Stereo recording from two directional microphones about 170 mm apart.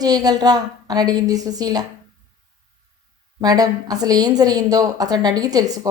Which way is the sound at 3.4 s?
20° right (ahead or behind).